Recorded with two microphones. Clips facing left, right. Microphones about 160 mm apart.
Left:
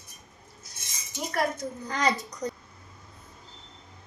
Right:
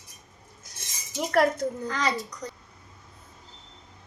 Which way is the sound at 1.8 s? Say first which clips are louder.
Left 1 dB; 20° left (ahead or behind).